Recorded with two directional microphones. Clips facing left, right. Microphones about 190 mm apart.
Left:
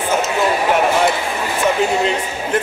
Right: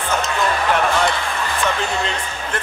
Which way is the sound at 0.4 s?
15° left (ahead or behind).